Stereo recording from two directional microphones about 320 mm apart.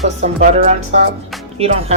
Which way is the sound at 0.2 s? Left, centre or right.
Right.